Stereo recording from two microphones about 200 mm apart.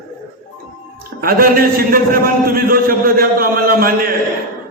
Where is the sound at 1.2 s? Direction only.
45° right (ahead or behind).